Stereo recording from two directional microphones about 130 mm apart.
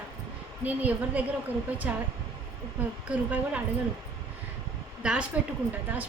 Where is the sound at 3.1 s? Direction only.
10° right (ahead or behind).